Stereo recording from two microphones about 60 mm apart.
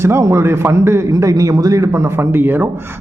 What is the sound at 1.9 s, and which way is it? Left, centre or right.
Speech, right.